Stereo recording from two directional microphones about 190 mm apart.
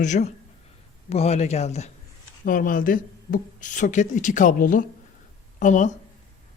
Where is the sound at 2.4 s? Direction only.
45° left (ahead or behind).